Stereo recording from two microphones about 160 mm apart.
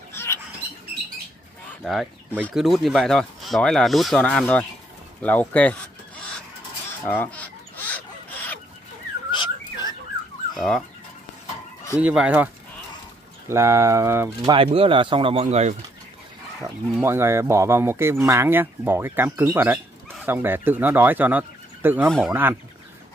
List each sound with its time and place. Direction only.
0.1 s rodents: 15° left (ahead or behind)
1.7 s chicken: centre (ahead or behind)
2.5 s speech: centre (ahead or behind)
5.2 s a sound: 10° left (ahead or behind)
7.1 s bird: 10° left (ahead or behind)
9.3 s whistling: 25° left (ahead or behind)
10.5 s fowl: centre (ahead or behind)
12.0 s speech: 10° right (ahead or behind)
13.5 s speech: 15° right (ahead or behind)
14.5 s speech: 35° right (ahead or behind)
17.0 s speech: 15° right (ahead or behind)